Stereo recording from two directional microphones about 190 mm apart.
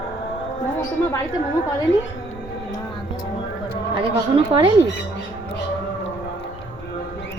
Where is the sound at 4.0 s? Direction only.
30° right (ahead or behind).